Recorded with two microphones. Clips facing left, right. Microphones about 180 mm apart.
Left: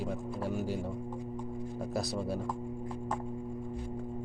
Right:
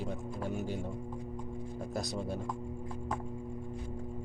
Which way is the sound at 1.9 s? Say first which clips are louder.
Left 2 dB; centre (ahead or behind).